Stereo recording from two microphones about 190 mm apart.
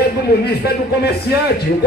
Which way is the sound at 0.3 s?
55° left (ahead or behind).